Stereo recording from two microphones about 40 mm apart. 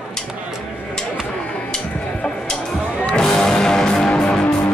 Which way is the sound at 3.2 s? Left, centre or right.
Centre.